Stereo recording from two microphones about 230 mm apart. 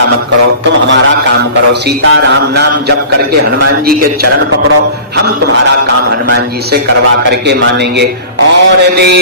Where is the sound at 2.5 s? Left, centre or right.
Right.